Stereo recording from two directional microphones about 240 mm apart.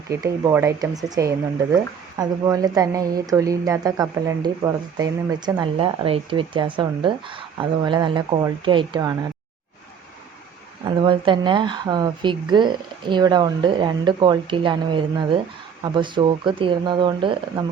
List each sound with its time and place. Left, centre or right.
0.1 s speech: centre
10.8 s speech: centre